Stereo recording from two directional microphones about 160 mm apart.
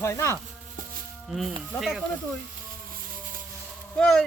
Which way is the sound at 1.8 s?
Centre (ahead or behind).